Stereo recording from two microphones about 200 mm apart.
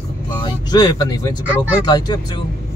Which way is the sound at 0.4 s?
20° left (ahead or behind).